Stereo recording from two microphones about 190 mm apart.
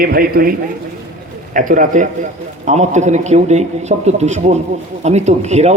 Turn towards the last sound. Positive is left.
turn(degrees=-35)  # may be behind; listen again after turning